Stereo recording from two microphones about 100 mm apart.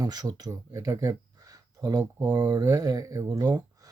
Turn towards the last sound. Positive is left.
turn(degrees=-35)  # may be behind; listen again after turning